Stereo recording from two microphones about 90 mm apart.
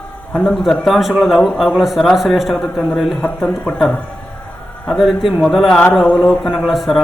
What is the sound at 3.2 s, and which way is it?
Speech, 15° left (ahead or behind).